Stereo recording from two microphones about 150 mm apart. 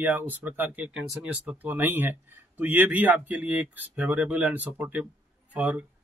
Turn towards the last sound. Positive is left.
turn(degrees=-10)  # may be behind; listen again after turning